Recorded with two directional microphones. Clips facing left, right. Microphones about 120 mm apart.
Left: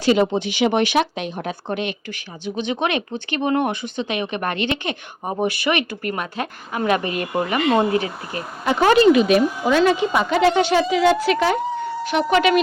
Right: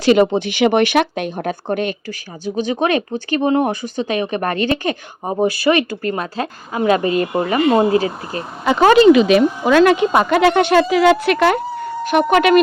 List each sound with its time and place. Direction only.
0.0 s speech: 65° right (ahead or behind); by 4.9 s 40° right (ahead or behind)
5.2 s speech: 25° right (ahead or behind)
7.6 s speech: 5° right (ahead or behind)
7.9 s speech: 30° right (ahead or behind)
8.7 s speech: 90° right; by 11.6 s 65° right (ahead or behind)
11.9 s a woman's voice: 50° right (ahead or behind)